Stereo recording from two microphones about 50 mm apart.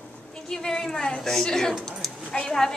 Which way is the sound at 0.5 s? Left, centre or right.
Centre.